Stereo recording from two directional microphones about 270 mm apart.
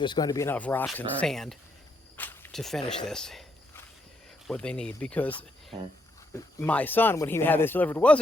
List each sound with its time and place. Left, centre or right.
0.0 s speech: centre
2.1 s a sound: centre
4.4 s speech: centre
6.3 s speech: centre